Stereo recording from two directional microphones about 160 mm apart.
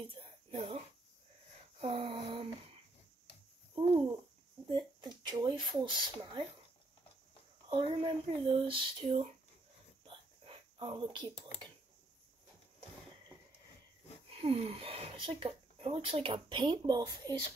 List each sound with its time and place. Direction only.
0.0 s whispering: 35° right (ahead or behind)
1.8 s speech: 40° right (ahead or behind)
4.6 s speech: 30° right (ahead or behind)
7.7 s speech: 35° right (ahead or behind)
10.0 s a sound: 35° right (ahead or behind)
14.3 s speech: 35° right (ahead or behind)